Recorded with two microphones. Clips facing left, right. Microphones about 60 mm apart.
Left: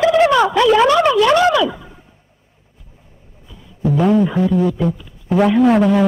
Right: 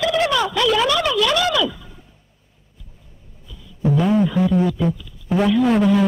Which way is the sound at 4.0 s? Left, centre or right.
Centre.